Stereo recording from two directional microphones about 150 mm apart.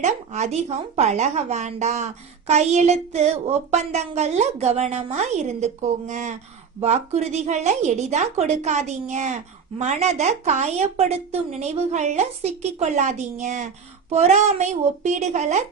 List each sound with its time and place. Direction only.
0.0 s a woman's voice: 50° right (ahead or behind)